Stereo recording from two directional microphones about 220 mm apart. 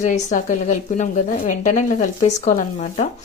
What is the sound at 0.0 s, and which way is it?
A woman's voice, 35° left (ahead or behind).